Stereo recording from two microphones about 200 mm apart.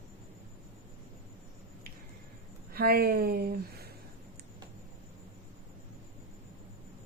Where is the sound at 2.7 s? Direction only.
50° right (ahead or behind).